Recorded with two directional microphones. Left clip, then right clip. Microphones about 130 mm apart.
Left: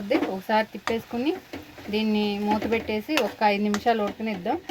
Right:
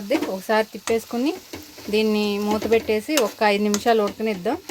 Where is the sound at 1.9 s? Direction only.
90° right.